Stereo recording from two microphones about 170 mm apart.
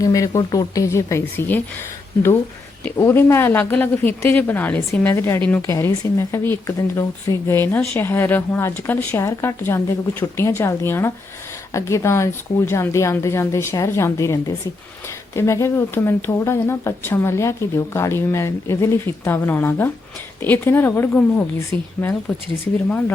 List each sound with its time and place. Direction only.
0.0 s speech: 20° left (ahead or behind)
2.8 s speech: 15° left (ahead or behind)